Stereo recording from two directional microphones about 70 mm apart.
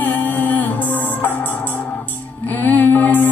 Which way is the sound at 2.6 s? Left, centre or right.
Left.